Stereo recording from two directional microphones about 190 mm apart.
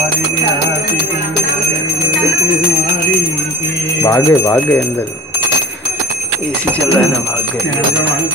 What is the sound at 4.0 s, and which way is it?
Speech, 15° left (ahead or behind).